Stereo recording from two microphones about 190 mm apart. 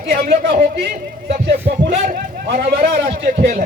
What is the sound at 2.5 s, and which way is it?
Speech, 50° right (ahead or behind).